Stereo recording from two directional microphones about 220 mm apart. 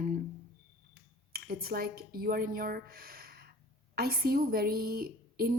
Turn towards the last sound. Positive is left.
turn(degrees=-40)  # may be behind; listen again after turning